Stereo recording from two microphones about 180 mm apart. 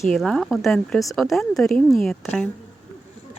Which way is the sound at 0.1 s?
Centre (ahead or behind).